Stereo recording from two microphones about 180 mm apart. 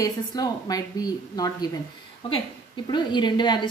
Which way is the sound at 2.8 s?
25° left (ahead or behind).